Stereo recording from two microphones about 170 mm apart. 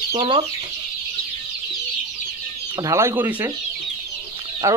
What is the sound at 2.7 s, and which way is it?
Speech, 20° right (ahead or behind).